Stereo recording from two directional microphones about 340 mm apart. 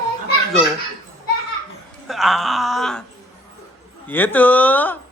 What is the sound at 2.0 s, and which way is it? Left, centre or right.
Groan, centre.